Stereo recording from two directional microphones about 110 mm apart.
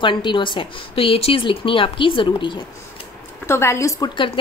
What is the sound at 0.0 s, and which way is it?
A woman's voice, 45° left (ahead or behind).